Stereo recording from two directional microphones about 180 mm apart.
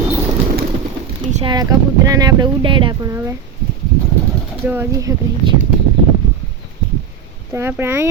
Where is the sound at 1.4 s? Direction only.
25° right (ahead or behind).